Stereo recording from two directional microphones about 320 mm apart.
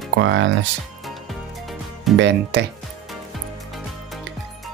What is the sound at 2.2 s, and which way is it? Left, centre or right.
Speech, right.